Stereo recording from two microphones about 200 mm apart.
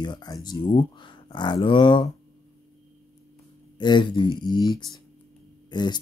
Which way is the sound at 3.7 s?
20° left (ahead or behind).